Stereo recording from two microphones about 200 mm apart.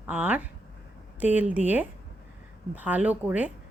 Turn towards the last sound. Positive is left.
turn(degrees=-5)  # may be behind; listen again after turning